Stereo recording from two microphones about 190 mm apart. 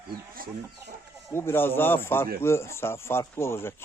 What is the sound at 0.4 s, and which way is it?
Speech, 50° right (ahead or behind).